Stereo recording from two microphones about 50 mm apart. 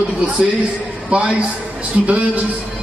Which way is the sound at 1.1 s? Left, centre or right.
Right.